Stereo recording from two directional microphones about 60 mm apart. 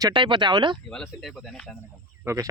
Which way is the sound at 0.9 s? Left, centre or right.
Centre.